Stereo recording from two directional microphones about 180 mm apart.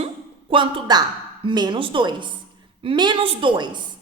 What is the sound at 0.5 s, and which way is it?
A woman's voice, 25° right (ahead or behind).